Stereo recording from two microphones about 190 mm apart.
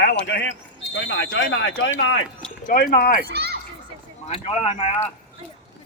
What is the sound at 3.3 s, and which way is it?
Speech, 55° right (ahead or behind).